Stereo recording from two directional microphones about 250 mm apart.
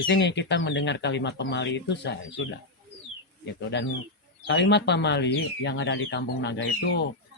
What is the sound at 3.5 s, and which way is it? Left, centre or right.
Speech, left.